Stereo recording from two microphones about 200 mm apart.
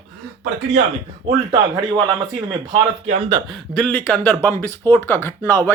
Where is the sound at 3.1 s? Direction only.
35° right (ahead or behind).